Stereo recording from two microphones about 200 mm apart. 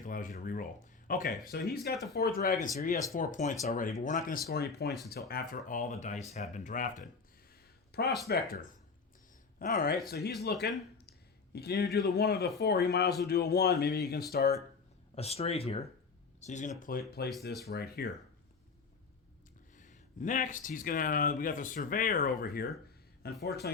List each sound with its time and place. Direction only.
0.0 s speech: 40° left (ahead or behind)
5.3 s speech: 45° left (ahead or behind)
8.0 s speech: centre (ahead or behind)
8.3 s speech: 45° left (ahead or behind)
15.1 s speech: 30° left (ahead or behind); by 18.1 s 50° left (ahead or behind)
19.7 s speech: 40° left (ahead or behind)